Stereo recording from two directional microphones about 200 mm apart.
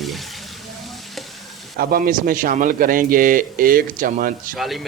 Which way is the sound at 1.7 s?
50° right (ahead or behind).